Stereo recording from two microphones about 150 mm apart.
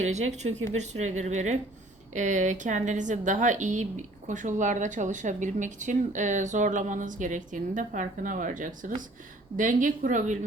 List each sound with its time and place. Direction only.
0.0 s a woman's voice: 50° right (ahead or behind)